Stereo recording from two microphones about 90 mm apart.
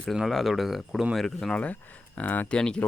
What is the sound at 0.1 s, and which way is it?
Speech, centre (ahead or behind).